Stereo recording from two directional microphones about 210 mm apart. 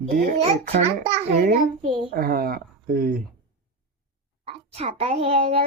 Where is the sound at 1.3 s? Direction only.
40° right (ahead or behind).